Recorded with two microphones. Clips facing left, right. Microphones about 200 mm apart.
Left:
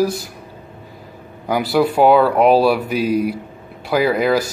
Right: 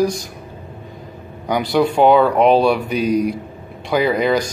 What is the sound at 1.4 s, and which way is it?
Speech, 5° left (ahead or behind).